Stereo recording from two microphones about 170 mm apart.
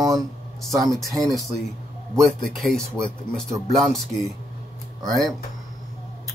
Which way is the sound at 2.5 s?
Centre (ahead or behind).